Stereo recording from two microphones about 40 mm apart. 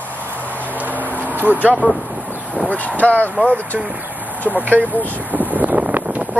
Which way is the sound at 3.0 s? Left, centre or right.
Left.